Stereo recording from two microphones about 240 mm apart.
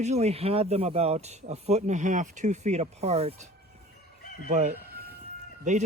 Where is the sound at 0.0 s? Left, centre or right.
Right.